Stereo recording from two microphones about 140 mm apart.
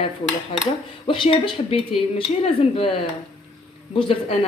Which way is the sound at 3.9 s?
40° left (ahead or behind).